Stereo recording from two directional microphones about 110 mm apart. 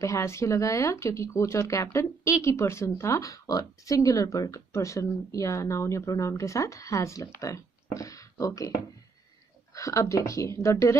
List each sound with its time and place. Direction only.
0.0 s speech: 25° left (ahead or behind)
9.8 s speech: 30° left (ahead or behind)